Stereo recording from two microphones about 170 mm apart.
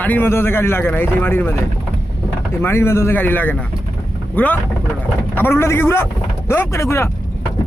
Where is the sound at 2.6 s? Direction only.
15° left (ahead or behind).